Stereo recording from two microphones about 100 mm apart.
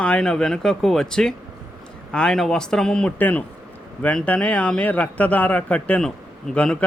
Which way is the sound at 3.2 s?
15° left (ahead or behind).